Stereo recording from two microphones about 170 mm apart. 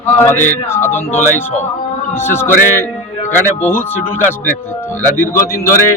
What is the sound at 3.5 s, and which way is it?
Speech, 10° left (ahead or behind).